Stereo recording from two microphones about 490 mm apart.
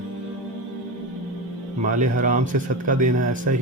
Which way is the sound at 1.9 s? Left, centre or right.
Centre.